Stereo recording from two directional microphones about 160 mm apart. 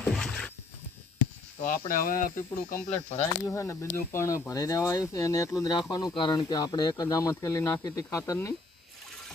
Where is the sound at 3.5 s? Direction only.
15° left (ahead or behind).